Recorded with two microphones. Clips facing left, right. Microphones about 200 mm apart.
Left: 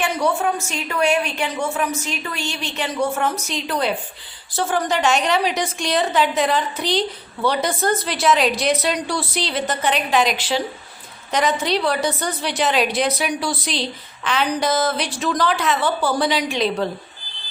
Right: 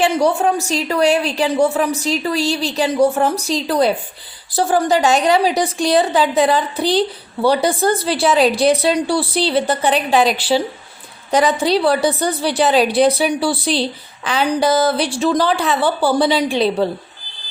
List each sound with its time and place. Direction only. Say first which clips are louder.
0.0 s a woman's voice: right 5 dB; 35° right (ahead or behind)